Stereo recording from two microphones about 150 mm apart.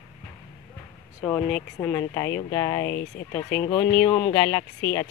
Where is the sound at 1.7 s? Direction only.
20° left (ahead or behind).